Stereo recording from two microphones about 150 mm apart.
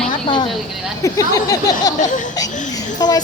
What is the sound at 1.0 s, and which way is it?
Speech, 25° left (ahead or behind).